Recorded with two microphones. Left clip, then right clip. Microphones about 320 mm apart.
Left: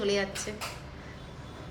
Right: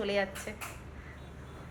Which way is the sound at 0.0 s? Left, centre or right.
Centre.